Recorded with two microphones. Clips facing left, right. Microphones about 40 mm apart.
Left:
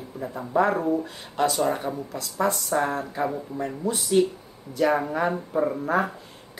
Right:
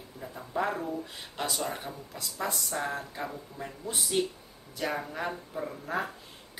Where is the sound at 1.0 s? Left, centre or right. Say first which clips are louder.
Left 11 dB; centre.